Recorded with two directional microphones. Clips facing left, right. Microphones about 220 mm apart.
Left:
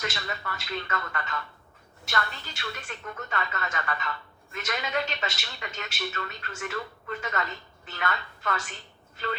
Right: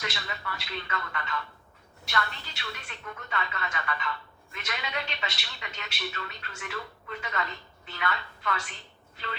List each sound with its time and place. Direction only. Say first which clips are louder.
0.0 s a man's voice: left 3 dB; 45° left (ahead or behind)